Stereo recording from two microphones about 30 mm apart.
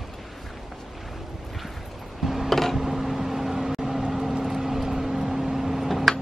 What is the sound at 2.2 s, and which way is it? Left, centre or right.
Music, centre.